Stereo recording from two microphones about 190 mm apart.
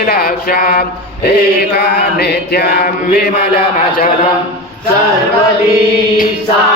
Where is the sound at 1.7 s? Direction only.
60° left (ahead or behind).